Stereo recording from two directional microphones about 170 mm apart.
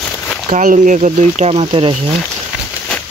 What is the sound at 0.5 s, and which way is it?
Speech, 50° right (ahead or behind).